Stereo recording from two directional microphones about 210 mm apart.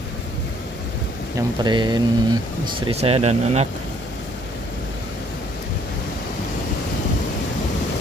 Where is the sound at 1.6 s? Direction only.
20° right (ahead or behind).